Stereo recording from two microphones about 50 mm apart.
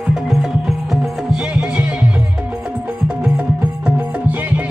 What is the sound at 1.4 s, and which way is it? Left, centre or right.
Music, centre.